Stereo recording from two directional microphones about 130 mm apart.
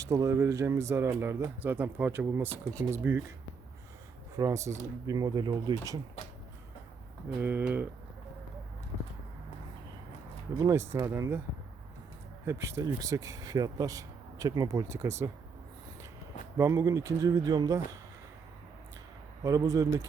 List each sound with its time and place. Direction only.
0.0 s speech: 25° right (ahead or behind)
4.4 s speech: 25° right (ahead or behind)
7.3 s speech: 10° right (ahead or behind)
10.6 s speech: 20° right (ahead or behind)
12.5 s speech: 20° right (ahead or behind)
16.6 s speech: 25° right (ahead or behind)
19.4 s speech: 25° right (ahead or behind)